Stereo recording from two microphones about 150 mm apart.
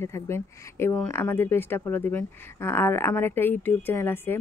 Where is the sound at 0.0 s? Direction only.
15° left (ahead or behind).